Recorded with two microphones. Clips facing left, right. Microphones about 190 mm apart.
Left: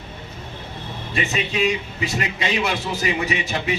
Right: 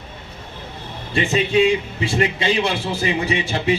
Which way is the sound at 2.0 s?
30° right (ahead or behind).